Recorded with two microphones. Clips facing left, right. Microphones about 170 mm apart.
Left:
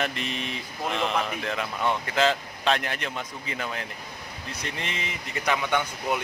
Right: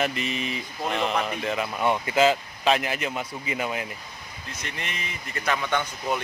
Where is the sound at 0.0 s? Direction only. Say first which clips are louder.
Right 3 dB; 5° right (ahead or behind).